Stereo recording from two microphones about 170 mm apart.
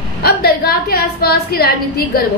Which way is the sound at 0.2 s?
65° left (ahead or behind).